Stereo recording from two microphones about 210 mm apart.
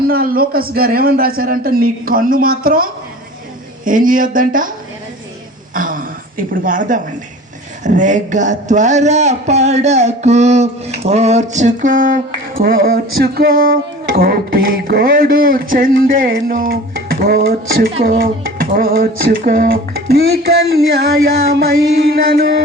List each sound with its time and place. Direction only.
0.0 s music: 45° right (ahead or behind)
3.8 s a man's voice: 40° right (ahead or behind)
5.7 s a sound: 40° right (ahead or behind)
7.9 s a man's voice: 35° right (ahead or behind)
14.2 s music: 45° right (ahead or behind)